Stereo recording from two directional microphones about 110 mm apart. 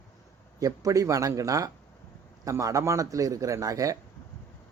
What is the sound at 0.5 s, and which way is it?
A man's voice, 30° right (ahead or behind).